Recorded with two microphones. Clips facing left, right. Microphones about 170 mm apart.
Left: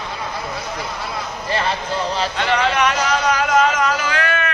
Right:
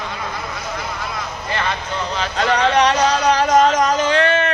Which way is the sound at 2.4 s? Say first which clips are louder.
Right 4 dB; 35° right (ahead or behind).